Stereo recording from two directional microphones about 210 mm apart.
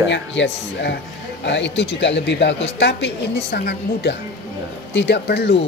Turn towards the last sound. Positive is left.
turn(degrees=55)  # may be behind; listen again after turning